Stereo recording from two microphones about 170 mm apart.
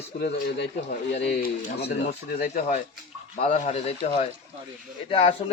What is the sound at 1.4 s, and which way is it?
Speech, 80° left.